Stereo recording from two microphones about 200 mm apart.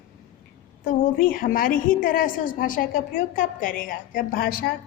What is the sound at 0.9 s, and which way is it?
A woman's voice, 45° left (ahead or behind).